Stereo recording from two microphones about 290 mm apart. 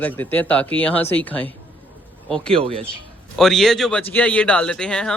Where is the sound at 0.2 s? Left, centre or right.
Centre.